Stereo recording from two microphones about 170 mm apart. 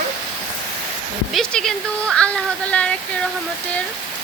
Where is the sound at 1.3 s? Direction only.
5° left (ahead or behind).